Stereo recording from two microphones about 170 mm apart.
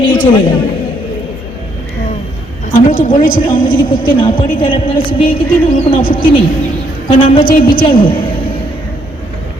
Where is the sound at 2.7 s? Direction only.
55° left (ahead or behind).